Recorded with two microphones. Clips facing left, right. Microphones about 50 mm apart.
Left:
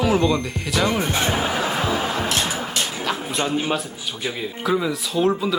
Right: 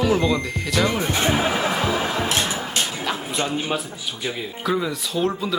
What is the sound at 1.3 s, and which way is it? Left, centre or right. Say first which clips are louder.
Speech: right 1 dB; centre.